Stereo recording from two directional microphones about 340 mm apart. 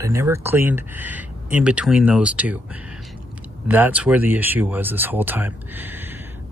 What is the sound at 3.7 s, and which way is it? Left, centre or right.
Speech, centre.